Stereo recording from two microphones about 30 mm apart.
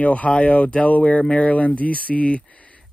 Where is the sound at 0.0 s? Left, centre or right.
Left.